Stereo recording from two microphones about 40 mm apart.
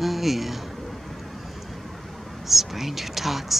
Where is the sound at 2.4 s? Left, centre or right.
Centre.